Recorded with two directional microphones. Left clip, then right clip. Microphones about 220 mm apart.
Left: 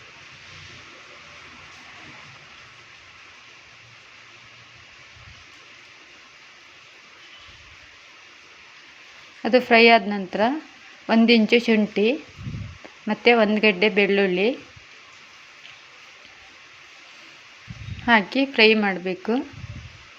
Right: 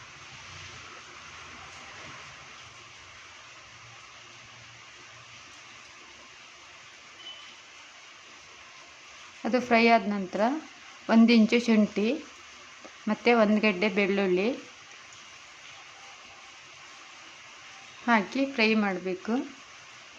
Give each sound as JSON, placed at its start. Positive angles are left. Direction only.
{"t": 9.4, "sound": "speech", "side_deg": 10}
{"t": 18.0, "sound": "speech", "side_deg": 15}